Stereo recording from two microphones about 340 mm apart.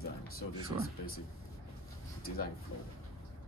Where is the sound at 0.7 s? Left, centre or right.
Centre.